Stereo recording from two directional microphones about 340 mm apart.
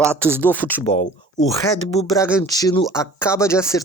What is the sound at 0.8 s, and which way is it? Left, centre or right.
Speech, left.